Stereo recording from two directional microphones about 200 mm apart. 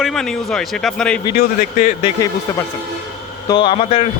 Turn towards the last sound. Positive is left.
turn(degrees=30)  # may be behind; listen again after turning